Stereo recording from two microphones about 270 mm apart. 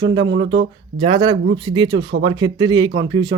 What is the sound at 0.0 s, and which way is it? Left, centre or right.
Speech, centre.